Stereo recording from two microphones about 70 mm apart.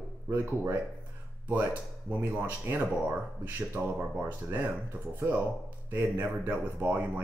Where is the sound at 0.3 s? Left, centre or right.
Right.